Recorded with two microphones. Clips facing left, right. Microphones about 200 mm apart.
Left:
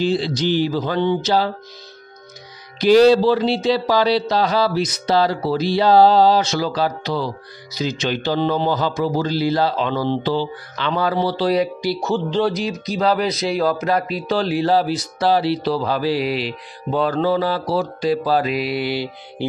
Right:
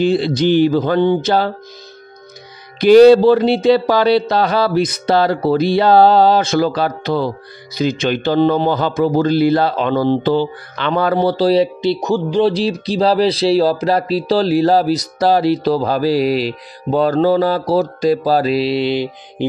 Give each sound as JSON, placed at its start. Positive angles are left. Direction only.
{"t": 0.0, "sound": "a man's voice", "side_deg": -55}
{"t": 2.8, "sound": "a man's voice", "side_deg": -55}
{"t": 12.5, "sound": "speech", "side_deg": -30}